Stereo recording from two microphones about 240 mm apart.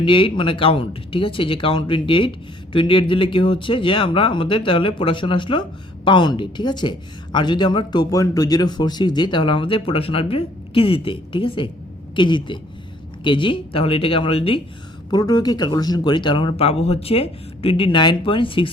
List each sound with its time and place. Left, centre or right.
0.0 s speech: left